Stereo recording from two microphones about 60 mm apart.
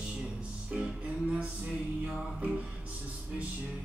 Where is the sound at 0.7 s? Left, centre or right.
Centre.